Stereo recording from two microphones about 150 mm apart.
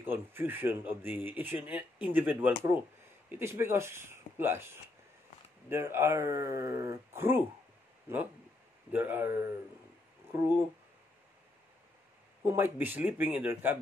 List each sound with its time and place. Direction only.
0.0 s speech: 15° right (ahead or behind)
5.7 s speech: 15° right (ahead or behind)
8.9 s speech: 15° right (ahead or behind)
12.4 s speech: 15° right (ahead or behind)